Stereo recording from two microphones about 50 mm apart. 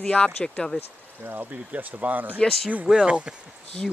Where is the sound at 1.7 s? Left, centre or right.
Right.